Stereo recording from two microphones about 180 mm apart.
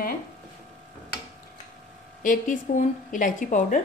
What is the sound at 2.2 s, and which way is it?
A woman's voice, 45° left (ahead or behind).